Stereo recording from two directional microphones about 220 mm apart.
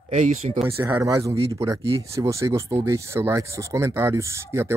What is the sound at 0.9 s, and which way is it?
Speech, 15° right (ahead or behind).